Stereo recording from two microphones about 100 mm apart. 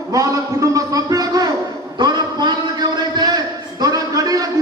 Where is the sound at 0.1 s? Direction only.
35° right (ahead or behind).